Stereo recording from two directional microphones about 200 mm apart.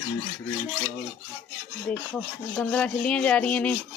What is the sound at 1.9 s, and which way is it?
Rub, 5° left (ahead or behind).